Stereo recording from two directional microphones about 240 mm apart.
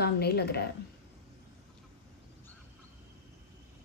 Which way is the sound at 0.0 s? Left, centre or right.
Left.